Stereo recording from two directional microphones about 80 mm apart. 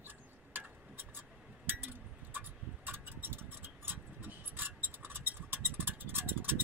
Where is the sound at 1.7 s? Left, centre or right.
Right.